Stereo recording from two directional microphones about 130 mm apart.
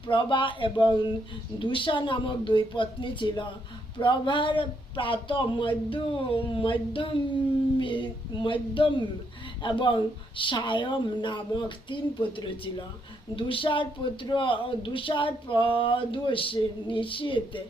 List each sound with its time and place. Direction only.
0.1 s a man's voice: 40° left (ahead or behind)
13.3 s a man's voice: 40° left (ahead or behind)